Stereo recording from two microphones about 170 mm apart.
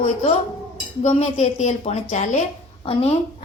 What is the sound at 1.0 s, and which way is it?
Speech, 40° left (ahead or behind).